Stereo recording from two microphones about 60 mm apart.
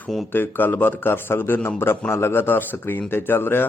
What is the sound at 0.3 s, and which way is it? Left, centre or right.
A man's voice, left.